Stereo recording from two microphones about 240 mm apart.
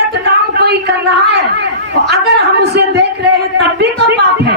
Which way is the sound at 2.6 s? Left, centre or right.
Right.